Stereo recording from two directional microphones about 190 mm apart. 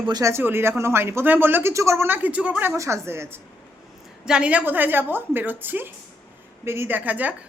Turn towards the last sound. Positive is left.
turn(degrees=-10)  # may be behind; listen again after turning